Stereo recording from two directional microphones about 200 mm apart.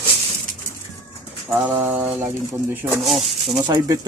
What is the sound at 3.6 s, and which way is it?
Speech, 20° right (ahead or behind).